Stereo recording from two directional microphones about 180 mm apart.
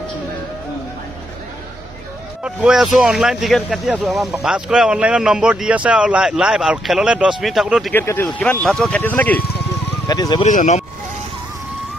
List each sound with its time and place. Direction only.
2.4 s speech: 5° right (ahead or behind)
7.9 s speech: 15° left (ahead or behind)
8.4 s speech: centre (ahead or behind)
10.0 s speech: 20° left (ahead or behind)
10.4 s speech: 40° left (ahead or behind)